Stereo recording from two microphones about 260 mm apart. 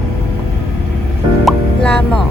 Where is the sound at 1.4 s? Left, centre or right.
Centre.